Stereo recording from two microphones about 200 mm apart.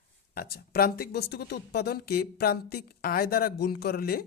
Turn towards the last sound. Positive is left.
turn(degrees=50)  # may be behind; listen again after turning